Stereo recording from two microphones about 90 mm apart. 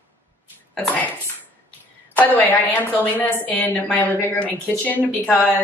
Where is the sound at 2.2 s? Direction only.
20° left (ahead or behind).